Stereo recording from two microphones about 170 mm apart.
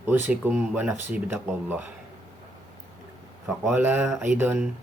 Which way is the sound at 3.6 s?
10° right (ahead or behind).